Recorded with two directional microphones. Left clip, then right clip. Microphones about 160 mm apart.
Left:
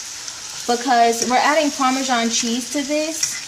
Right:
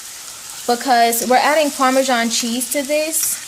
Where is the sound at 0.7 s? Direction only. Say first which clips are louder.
Right 1 dB; 60° right (ahead or behind).